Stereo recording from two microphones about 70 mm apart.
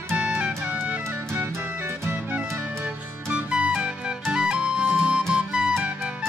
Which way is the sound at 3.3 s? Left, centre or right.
Centre.